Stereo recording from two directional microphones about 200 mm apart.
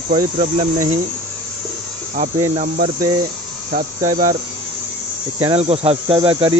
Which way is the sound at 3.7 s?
40° right (ahead or behind).